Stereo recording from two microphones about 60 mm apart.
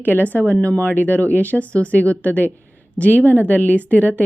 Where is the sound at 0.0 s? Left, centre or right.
Left.